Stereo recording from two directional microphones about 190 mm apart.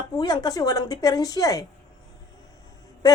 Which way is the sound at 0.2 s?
20° left (ahead or behind).